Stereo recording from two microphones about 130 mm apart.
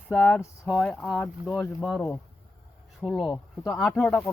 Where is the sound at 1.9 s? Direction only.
20° left (ahead or behind).